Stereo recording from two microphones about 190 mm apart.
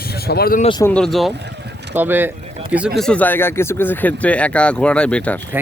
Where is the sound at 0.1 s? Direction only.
55° left (ahead or behind).